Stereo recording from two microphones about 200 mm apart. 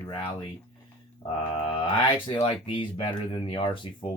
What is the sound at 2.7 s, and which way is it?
Speech, 25° left (ahead or behind).